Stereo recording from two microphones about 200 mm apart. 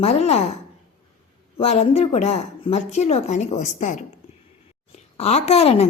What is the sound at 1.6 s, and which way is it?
Speech, 30° left (ahead or behind).